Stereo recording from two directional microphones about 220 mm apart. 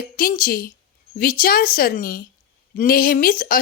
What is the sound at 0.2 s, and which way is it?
Speech, 40° left (ahead or behind).